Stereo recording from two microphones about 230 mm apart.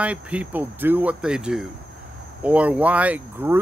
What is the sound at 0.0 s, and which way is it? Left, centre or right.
Speech, centre.